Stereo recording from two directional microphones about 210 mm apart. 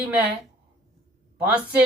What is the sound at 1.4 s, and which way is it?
Speech, 5° right (ahead or behind).